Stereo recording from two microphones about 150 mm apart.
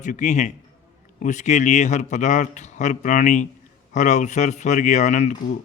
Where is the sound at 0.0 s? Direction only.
55° left (ahead or behind).